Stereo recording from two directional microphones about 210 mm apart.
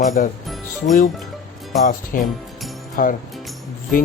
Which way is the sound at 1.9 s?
40° left (ahead or behind).